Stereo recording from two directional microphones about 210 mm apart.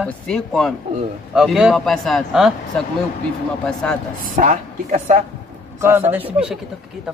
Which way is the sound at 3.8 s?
5° left (ahead or behind).